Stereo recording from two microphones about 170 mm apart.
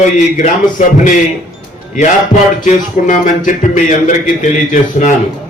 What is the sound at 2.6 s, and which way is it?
A man's voice, 50° left (ahead or behind).